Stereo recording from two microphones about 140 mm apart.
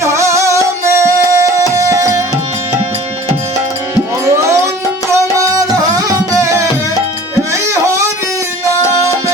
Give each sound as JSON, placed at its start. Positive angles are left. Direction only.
{"t": 0.0, "sound": "music", "side_deg": -20}
{"t": 1.9, "sound": "tabla", "side_deg": -20}
{"t": 4.3, "sound": "music", "side_deg": -20}